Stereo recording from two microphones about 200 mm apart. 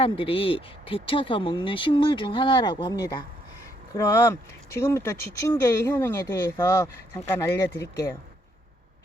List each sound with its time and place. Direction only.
0.0 s speech: 25° left (ahead or behind)